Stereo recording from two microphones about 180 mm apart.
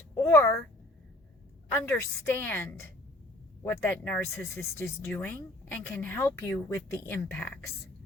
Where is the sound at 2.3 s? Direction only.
10° left (ahead or behind).